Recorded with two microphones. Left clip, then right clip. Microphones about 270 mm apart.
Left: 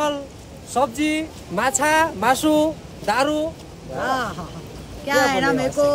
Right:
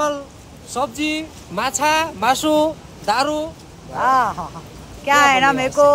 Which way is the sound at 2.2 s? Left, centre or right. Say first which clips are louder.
Right 2 dB; right.